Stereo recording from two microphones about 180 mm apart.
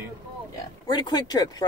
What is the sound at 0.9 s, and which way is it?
Speech, 25° left (ahead or behind).